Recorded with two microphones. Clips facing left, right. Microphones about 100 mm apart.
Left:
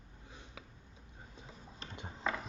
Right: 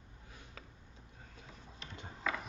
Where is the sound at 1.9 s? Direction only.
25° left (ahead or behind).